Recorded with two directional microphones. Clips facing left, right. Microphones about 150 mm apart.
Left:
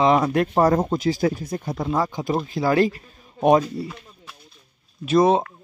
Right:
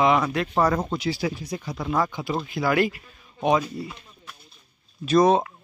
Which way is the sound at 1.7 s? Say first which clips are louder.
Left 1 dB; 25° left (ahead or behind).